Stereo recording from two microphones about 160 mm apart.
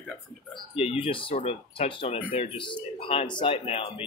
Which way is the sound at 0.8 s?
35° left (ahead or behind).